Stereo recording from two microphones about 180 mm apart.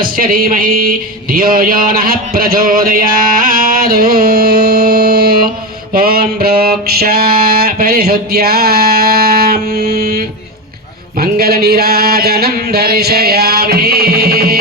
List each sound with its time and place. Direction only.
0.0 s speech: 55° right (ahead or behind)
5.9 s mantra: 55° right (ahead or behind)
11.2 s a sound: 60° right (ahead or behind)